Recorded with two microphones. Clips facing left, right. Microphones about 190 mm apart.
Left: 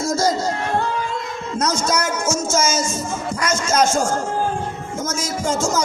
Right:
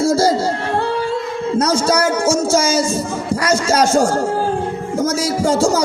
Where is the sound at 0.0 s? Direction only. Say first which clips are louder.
Right 5 dB; 30° right (ahead or behind).